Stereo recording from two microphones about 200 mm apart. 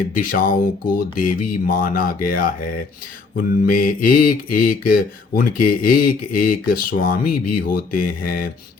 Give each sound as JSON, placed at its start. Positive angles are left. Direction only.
{"t": 0.1, "sound": "mantra", "side_deg": 45}